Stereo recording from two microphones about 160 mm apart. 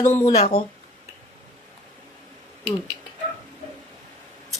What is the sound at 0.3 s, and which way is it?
Speech, 45° left (ahead or behind).